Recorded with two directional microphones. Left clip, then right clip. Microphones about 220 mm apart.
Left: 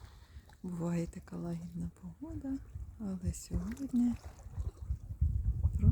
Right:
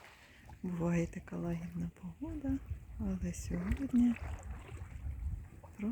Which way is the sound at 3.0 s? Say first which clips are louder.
Right 1 dB; 5° left (ahead or behind).